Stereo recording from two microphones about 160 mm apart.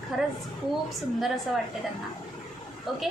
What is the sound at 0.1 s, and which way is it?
Speech, centre (ahead or behind).